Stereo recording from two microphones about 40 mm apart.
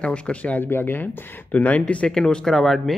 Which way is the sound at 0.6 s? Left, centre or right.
Left.